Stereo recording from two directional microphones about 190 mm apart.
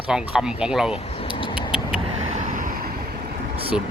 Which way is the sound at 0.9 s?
30° left (ahead or behind).